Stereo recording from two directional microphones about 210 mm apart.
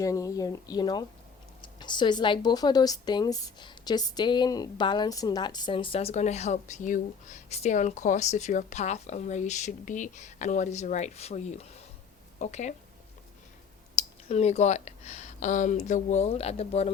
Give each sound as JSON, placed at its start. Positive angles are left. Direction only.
{"t": 0.0, "sound": "speech", "side_deg": 15}
{"t": 13.9, "sound": "speech", "side_deg": 30}